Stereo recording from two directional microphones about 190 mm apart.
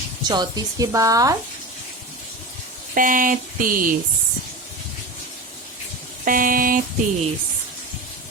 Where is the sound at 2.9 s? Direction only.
45° right (ahead or behind).